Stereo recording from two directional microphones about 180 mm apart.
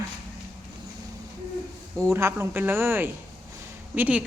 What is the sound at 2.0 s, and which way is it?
A woman's voice, 15° right (ahead or behind).